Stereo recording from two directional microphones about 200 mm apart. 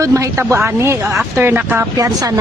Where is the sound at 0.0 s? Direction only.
15° right (ahead or behind).